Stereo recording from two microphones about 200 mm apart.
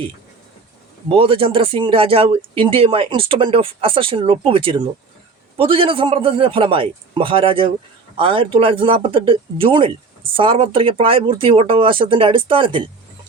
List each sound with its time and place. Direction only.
1.0 s speech: 25° right (ahead or behind)